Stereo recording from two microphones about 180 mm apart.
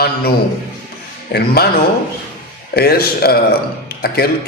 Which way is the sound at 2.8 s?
60° left (ahead or behind).